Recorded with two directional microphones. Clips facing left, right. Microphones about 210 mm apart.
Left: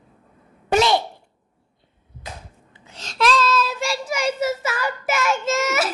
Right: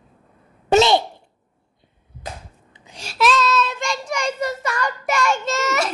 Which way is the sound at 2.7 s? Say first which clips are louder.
Right 2 dB; 15° right (ahead or behind).